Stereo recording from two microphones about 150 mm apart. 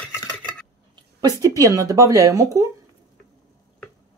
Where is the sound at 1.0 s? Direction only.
25° right (ahead or behind).